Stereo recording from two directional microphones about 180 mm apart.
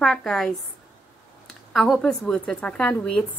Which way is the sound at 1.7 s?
Centre (ahead or behind).